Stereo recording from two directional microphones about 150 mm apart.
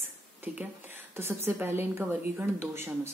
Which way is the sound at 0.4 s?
15° right (ahead or behind).